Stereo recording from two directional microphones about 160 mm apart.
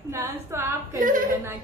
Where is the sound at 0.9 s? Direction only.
55° right (ahead or behind).